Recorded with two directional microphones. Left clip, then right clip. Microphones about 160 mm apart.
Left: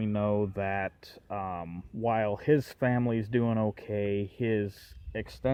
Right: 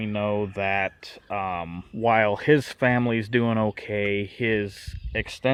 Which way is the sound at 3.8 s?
15° right (ahead or behind).